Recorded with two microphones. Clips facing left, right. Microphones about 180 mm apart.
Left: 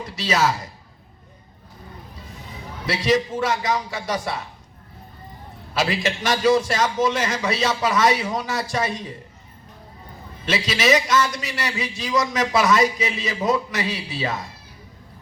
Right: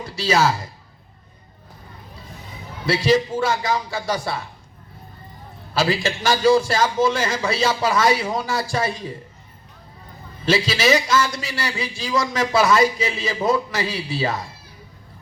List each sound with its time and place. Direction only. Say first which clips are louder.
0.0 s speech: right 2 dB; 30° right (ahead or behind)
2.8 s a man's voice: right 3 dB; 30° right (ahead or behind)
5.7 s a man's voice: right 2 dB; 30° right (ahead or behind)
10.4 s a man's voice: right 3 dB; 30° right (ahead or behind)